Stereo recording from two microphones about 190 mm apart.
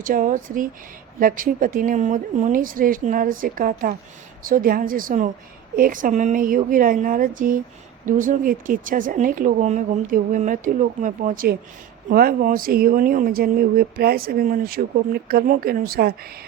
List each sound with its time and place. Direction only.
0.0 s speech: 45° right (ahead or behind)